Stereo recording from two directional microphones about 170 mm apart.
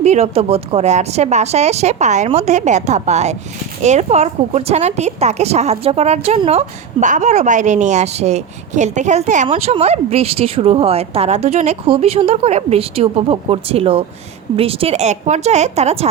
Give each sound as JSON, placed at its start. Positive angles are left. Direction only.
{"t": 0.0, "sound": "a woman's voice", "side_deg": -40}